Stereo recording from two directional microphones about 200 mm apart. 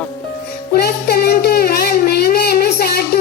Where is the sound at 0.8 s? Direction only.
50° left (ahead or behind).